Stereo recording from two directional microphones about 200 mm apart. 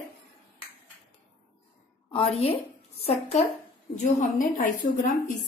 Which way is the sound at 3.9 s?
40° left (ahead or behind).